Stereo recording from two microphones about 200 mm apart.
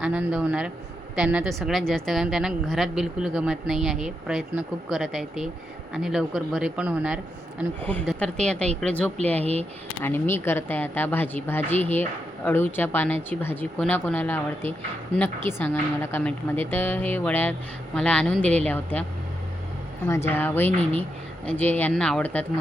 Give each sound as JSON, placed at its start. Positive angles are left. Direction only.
{"t": 0.0, "sound": "speech", "side_deg": -5}
{"t": 7.8, "sound": "a woman's voice", "side_deg": 10}
{"t": 9.4, "sound": "speech", "side_deg": -30}
{"t": 10.0, "sound": "a woman's voice", "side_deg": 10}
{"t": 20.1, "sound": "a woman's voice", "side_deg": 15}